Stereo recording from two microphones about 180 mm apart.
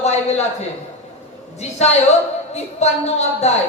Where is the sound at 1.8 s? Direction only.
35° left (ahead or behind).